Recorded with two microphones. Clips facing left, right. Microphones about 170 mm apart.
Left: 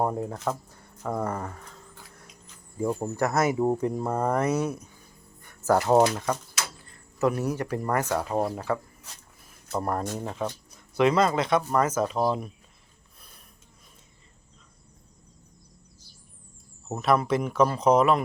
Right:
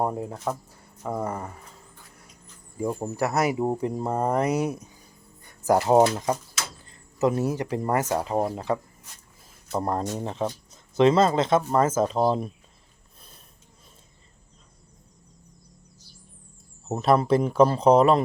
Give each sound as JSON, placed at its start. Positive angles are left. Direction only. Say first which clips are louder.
{"t": 0.0, "sound": "speech", "louder": "even", "side_deg": -15}
{"t": 2.9, "sound": "speech", "louder": "even", "side_deg": -10}
{"t": 3.8, "sound": "speech", "louder": "right 1 dB", "side_deg": -20}
{"t": 5.4, "sound": "music", "louder": "right 1 dB", "side_deg": -15}
{"t": 5.9, "sound": "speech", "louder": "right 2 dB", "side_deg": -20}
{"t": 16.9, "sound": "speech", "louder": "right 3 dB", "side_deg": -30}